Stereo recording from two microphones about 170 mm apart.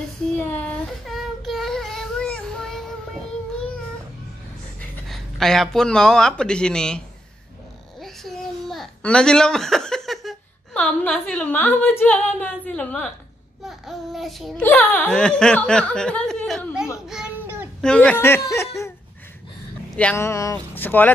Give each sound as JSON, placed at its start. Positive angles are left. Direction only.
{"t": 0.4, "sound": "child singing", "side_deg": 10}
{"t": 5.0, "sound": "speech", "side_deg": 0}
{"t": 8.0, "sound": "babbling", "side_deg": 0}
{"t": 12.0, "sound": "speech", "side_deg": 10}
{"t": 13.7, "sound": "a sound", "side_deg": 0}
{"t": 14.6, "sound": "speech", "side_deg": 10}
{"t": 17.8, "sound": "speech", "side_deg": 5}
{"t": 20.0, "sound": "speech", "side_deg": 10}